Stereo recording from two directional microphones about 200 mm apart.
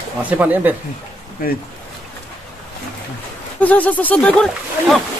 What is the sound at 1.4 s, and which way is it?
Speech, 45° left (ahead or behind).